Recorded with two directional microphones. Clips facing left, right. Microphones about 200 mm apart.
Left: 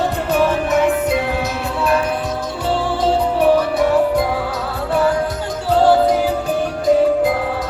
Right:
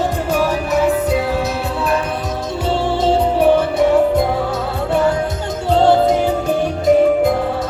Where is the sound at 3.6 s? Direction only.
25° right (ahead or behind).